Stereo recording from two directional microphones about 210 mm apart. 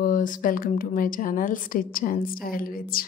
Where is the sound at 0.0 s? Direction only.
40° left (ahead or behind).